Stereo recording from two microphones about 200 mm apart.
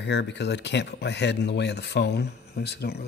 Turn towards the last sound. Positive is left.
turn(degrees=55)  # may be behind; listen again after turning